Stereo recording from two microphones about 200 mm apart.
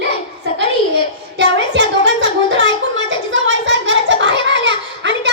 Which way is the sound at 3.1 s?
65° right (ahead or behind).